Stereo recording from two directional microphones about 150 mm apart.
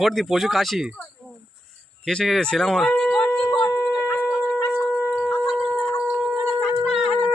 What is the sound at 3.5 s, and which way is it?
Shofar, 25° left (ahead or behind).